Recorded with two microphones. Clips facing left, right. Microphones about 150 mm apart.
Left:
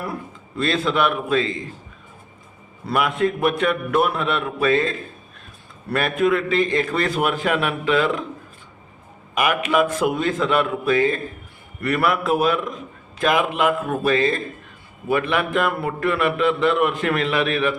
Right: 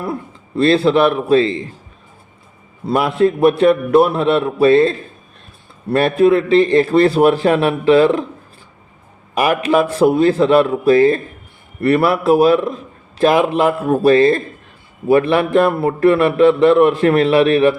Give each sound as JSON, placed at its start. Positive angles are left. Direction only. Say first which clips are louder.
{"t": 0.0, "sound": "a man's voice", "louder": "right 6 dB", "side_deg": -30}
{"t": 2.8, "sound": "a man's voice", "louder": "right 6 dB", "side_deg": -30}
{"t": 9.3, "sound": "a man's voice", "louder": "right 5 dB", "side_deg": -35}